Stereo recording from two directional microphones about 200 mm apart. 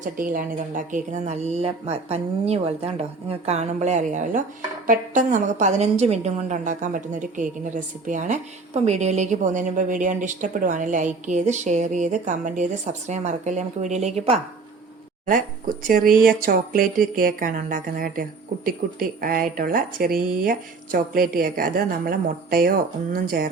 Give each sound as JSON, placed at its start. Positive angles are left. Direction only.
{"t": 0.0, "sound": "a woman's voice", "side_deg": -40}
{"t": 16.1, "sound": "speech", "side_deg": -45}